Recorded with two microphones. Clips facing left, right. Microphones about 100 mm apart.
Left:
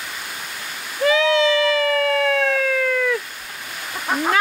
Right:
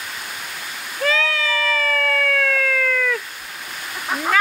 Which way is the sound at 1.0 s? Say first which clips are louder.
Left 6 dB; 15° left (ahead or behind).